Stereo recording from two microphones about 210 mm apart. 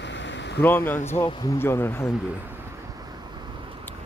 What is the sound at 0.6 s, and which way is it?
Speech, 10° left (ahead or behind).